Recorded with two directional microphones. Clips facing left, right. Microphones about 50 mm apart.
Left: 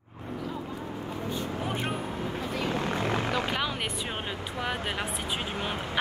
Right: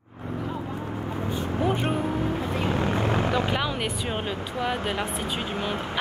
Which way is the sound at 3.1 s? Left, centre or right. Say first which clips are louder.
Right 4 dB; centre.